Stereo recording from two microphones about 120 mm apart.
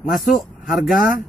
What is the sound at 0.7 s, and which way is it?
Speech, centre (ahead or behind).